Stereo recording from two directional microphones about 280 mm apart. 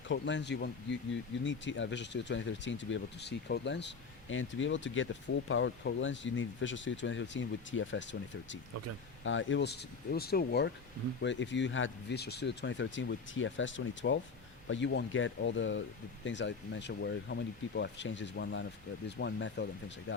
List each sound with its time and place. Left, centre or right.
0.1 s speech: left